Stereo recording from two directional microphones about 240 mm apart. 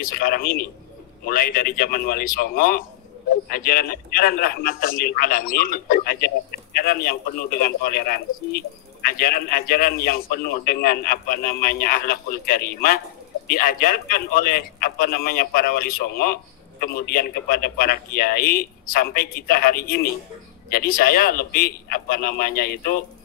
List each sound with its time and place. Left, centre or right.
0.0 s a man's voice: left